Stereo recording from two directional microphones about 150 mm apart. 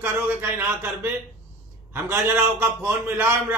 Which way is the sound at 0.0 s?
10° right (ahead or behind).